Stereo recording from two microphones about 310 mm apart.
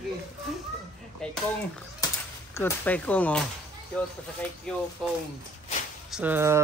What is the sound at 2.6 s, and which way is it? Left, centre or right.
Speech, centre.